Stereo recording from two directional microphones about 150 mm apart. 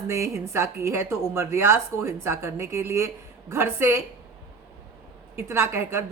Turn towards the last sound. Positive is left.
turn(degrees=-15)  # may be behind; listen again after turning